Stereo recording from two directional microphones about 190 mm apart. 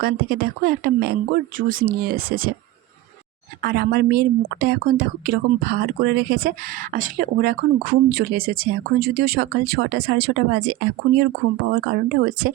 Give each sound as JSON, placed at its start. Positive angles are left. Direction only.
{"t": 0.0, "sound": "speech", "side_deg": -50}
{"t": 3.6, "sound": "a woman's voice", "side_deg": -55}